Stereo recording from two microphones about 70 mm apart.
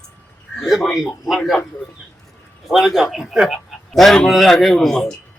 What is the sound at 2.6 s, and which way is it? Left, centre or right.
Speech, centre.